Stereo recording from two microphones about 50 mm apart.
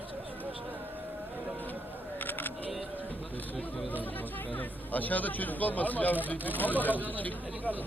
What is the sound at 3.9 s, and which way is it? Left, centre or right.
Speech, left.